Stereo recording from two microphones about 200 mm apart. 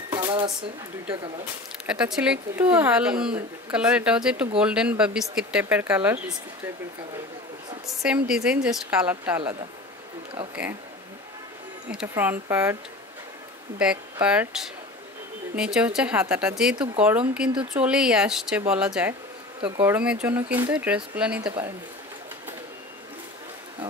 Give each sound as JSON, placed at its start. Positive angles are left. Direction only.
{"t": 0.1, "sound": "a sound", "side_deg": -20}
{"t": 1.9, "sound": "speech", "side_deg": -5}
{"t": 8.0, "sound": "speech", "side_deg": -5}
{"t": 10.5, "sound": "speech", "side_deg": -10}
{"t": 12.1, "sound": "speech", "side_deg": -10}
{"t": 13.8, "sound": "speech", "side_deg": -5}